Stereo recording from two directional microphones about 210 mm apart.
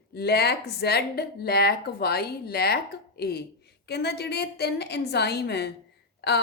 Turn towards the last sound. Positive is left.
turn(degrees=50)  # may be behind; listen again after turning